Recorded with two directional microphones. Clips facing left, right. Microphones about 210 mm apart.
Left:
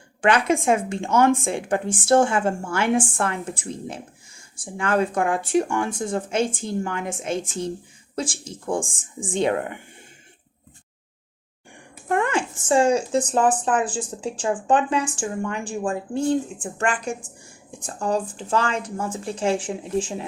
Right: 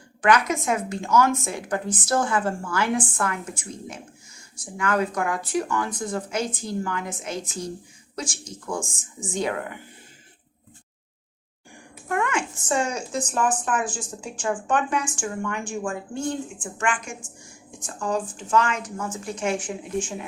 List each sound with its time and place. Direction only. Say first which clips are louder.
0.2 s speech: left 2 dB; 30° left (ahead or behind)
12.0 s speech: left 3 dB; 30° left (ahead or behind)